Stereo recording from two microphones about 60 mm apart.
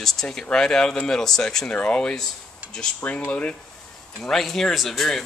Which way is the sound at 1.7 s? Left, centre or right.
Left.